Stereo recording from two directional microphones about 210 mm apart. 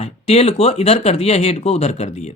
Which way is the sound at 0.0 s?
30° left (ahead or behind).